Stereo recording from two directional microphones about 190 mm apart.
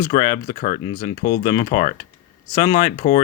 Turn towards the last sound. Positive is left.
turn(degrees=50)  # may be behind; listen again after turning